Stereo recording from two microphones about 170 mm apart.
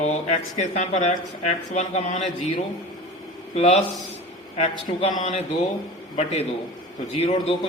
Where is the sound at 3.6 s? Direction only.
35° left (ahead or behind).